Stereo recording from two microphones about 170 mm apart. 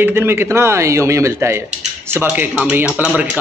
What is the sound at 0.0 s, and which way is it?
Speech, 15° right (ahead or behind).